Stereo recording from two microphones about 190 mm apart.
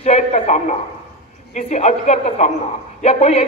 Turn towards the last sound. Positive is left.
turn(degrees=30)  # may be behind; listen again after turning